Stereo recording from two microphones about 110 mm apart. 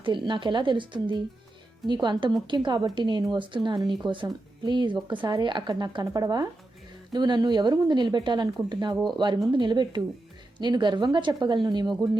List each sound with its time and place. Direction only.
0.0 s speech: 45° right (ahead or behind)